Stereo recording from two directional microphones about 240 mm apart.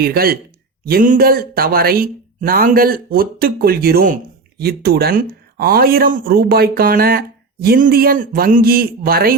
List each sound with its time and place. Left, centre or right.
0.0 s speech: right